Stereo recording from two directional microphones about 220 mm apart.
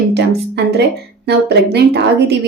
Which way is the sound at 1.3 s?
50° right (ahead or behind).